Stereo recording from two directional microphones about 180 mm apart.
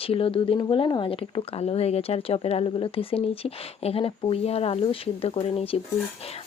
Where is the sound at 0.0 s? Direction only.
30° left (ahead or behind).